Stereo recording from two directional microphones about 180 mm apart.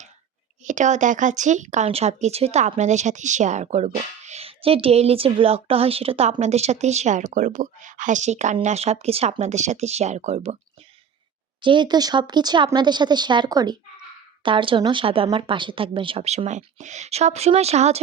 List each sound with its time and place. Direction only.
0.6 s speech: 45° right (ahead or behind)
11.6 s speech: 25° right (ahead or behind)